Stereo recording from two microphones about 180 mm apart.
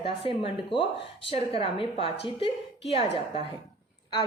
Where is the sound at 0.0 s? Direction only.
30° left (ahead or behind).